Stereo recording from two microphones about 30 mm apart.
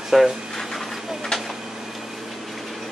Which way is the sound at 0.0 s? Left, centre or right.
Centre.